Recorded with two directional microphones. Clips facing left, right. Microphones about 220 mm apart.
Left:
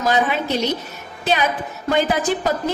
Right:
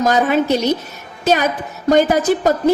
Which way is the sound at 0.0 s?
45° right (ahead or behind).